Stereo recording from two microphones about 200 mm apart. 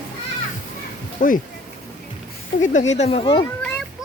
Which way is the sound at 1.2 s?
40° left (ahead or behind).